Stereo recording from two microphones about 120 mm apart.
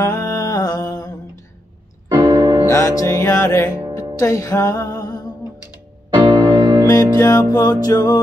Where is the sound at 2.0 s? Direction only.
35° right (ahead or behind).